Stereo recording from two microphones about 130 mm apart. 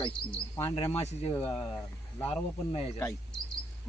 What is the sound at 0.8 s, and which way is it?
Speech, 50° left (ahead or behind).